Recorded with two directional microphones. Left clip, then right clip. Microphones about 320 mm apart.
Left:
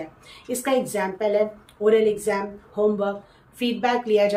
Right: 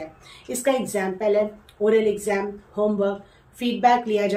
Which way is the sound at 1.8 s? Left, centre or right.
Left.